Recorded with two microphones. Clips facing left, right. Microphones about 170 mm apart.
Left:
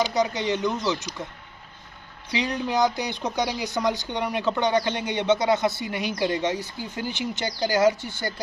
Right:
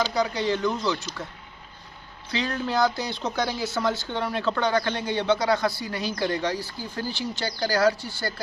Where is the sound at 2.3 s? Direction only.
15° left (ahead or behind).